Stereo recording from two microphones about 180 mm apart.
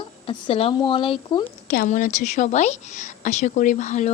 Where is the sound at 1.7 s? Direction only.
50° left (ahead or behind).